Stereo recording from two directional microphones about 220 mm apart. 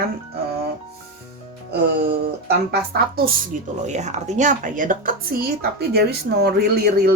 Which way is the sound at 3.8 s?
30° right (ahead or behind).